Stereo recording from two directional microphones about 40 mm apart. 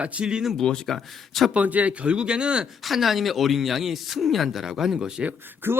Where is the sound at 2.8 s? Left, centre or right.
Centre.